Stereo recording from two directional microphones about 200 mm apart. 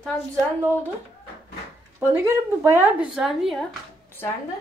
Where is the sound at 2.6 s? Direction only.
10° right (ahead or behind).